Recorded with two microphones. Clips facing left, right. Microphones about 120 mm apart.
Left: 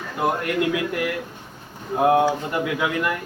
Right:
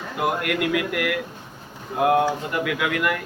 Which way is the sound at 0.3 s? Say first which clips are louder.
Left 1 dB; 25° left (ahead or behind).